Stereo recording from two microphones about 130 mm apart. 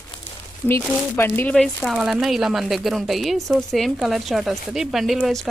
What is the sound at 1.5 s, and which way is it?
Speech, centre (ahead or behind).